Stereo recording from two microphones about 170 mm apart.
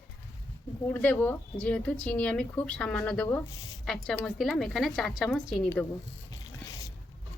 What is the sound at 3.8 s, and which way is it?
A woman's voice, 5° left (ahead or behind).